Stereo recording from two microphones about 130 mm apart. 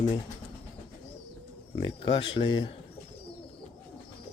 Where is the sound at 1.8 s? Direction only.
40° left (ahead or behind).